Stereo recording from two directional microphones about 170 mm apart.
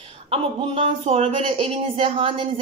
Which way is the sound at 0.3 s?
35° right (ahead or behind).